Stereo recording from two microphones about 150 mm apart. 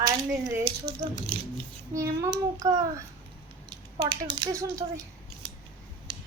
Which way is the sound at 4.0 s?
30° right (ahead or behind).